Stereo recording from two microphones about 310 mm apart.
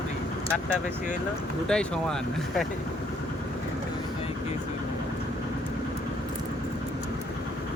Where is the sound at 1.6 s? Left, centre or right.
Centre.